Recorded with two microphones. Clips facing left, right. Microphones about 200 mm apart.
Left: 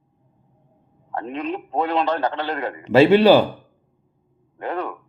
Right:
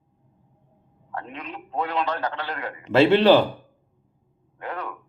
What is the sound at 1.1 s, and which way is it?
A man's voice, 30° left (ahead or behind).